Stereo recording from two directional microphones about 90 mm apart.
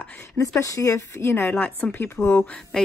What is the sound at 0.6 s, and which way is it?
Speech, 35° left (ahead or behind).